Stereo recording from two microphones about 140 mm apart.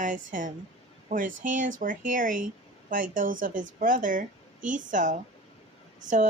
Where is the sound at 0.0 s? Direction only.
70° right (ahead or behind).